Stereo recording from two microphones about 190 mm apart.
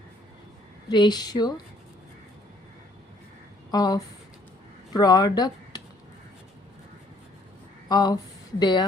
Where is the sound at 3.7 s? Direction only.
20° left (ahead or behind).